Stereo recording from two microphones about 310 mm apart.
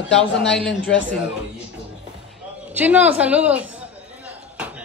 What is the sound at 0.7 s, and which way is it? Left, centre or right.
Speech, centre.